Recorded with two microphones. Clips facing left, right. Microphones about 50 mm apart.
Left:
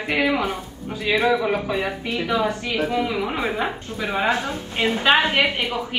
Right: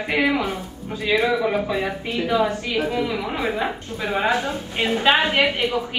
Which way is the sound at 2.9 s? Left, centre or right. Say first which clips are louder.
Left 1 dB; centre.